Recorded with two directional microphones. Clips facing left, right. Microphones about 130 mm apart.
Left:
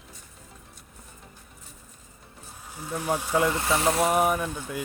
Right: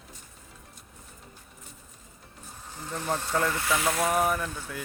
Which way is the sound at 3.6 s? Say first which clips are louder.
Left 3 dB; 30° left (ahead or behind).